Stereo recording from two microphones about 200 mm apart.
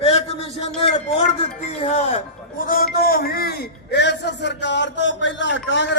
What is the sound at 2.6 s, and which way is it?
A man's voice, 45° left (ahead or behind).